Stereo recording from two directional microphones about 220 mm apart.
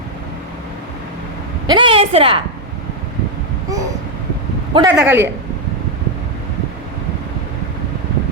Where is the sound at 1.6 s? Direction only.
20° right (ahead or behind).